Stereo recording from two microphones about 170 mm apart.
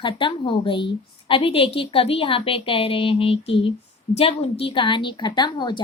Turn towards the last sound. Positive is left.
turn(degrees=25)  # may be behind; listen again after turning